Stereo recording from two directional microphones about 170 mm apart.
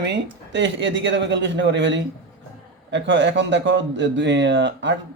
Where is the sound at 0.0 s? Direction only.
90° right.